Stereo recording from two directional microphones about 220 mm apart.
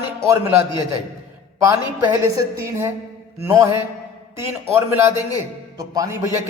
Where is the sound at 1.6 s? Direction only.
10° right (ahead or behind).